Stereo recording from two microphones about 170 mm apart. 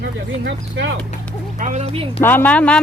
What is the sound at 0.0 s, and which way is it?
Speech, 90° right.